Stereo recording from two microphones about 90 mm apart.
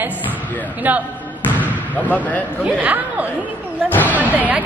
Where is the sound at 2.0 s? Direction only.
15° left (ahead or behind).